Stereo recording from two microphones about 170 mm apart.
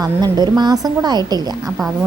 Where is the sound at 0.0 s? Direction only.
25° right (ahead or behind).